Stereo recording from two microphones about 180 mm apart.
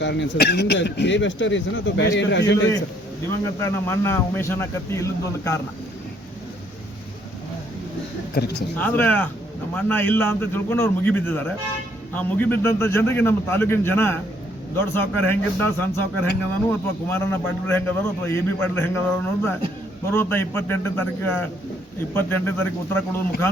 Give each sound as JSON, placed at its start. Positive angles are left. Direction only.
{"t": 0.0, "sound": "speech", "side_deg": 75}
{"t": 3.6, "sound": "a man's voice", "side_deg": 15}
{"t": 8.4, "sound": "speech", "side_deg": 60}
{"t": 8.8, "sound": "a man's voice", "side_deg": 10}